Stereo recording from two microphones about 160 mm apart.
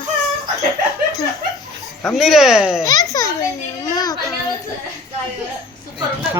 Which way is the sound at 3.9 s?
25° left (ahead or behind).